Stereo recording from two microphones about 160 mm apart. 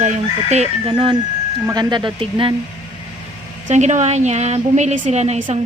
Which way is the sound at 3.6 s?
45° right (ahead or behind).